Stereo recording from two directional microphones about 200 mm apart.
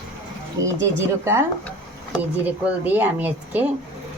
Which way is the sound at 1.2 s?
15° right (ahead or behind).